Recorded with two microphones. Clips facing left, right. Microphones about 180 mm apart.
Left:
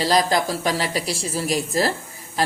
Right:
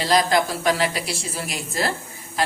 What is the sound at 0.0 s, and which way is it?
A woman's voice, 35° left (ahead or behind).